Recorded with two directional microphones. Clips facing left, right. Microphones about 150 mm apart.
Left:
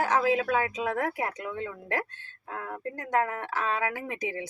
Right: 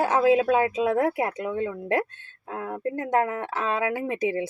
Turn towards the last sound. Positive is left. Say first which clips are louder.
# right 8 dB
turn(degrees=-25)  # may be behind; listen again after turning